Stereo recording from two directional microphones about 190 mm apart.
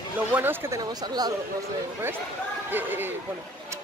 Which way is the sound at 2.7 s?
10° right (ahead or behind).